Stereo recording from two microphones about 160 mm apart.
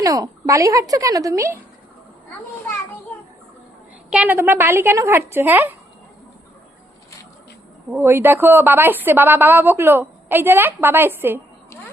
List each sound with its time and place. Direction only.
0.0 s a woman's voice: 20° right (ahead or behind)
4.1 s a woman's voice: 10° right (ahead or behind)
7.9 s a woman's voice: 15° right (ahead or behind)